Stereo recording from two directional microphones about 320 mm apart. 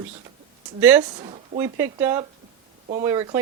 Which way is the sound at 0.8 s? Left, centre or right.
Centre.